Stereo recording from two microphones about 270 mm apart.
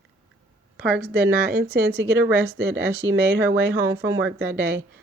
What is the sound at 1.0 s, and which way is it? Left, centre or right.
A woman's voice, right.